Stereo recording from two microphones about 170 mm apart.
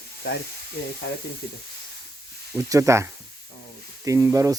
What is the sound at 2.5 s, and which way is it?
Speech, 20° right (ahead or behind).